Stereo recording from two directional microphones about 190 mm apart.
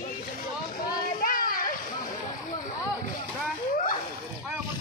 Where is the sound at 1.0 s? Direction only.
45° left (ahead or behind).